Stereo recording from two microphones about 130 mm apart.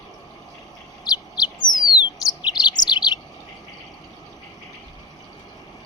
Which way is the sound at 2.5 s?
35° left (ahead or behind).